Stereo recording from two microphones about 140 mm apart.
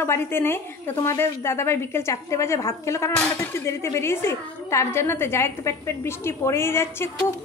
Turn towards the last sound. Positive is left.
turn(degrees=15)  # may be behind; listen again after turning